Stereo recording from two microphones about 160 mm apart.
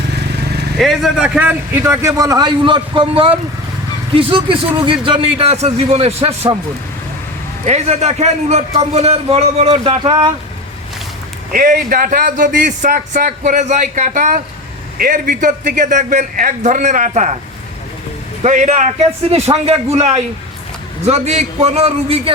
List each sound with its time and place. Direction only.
0.8 s a man's voice: centre (ahead or behind); by 6.6 s 40° right (ahead or behind)
7.6 s a man's voice: 40° right (ahead or behind)
11.5 s a man's voice: 60° right (ahead or behind)
18.4 s a man's voice: 50° right (ahead or behind)